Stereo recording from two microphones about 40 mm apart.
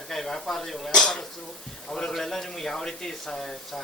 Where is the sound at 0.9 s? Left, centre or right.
Centre.